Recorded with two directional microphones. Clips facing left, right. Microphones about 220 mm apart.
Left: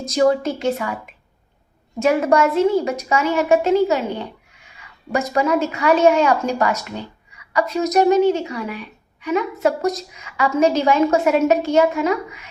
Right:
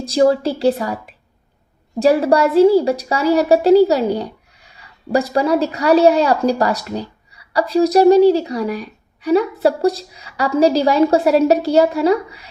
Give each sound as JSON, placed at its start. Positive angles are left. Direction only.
{"t": 0.1, "sound": "a woman's voice", "side_deg": -30}